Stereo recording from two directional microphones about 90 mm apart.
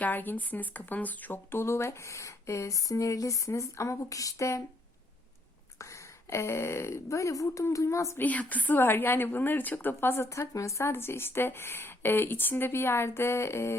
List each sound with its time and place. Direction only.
0.0 s speech: 20° left (ahead or behind); by 4.6 s 35° left (ahead or behind)
5.8 s speech: 35° left (ahead or behind)
8.2 s a woman's voice: 15° left (ahead or behind); by 13.7 s 30° left (ahead or behind)